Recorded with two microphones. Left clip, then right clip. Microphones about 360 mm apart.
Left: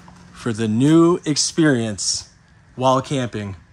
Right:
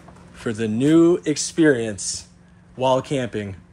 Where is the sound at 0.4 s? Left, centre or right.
Centre.